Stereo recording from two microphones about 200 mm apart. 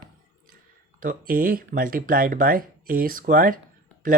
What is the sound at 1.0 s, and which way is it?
Speech, 45° right (ahead or behind).